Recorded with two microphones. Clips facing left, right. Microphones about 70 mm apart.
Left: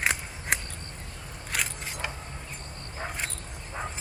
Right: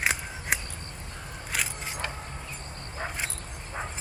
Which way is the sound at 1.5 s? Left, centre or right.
Centre.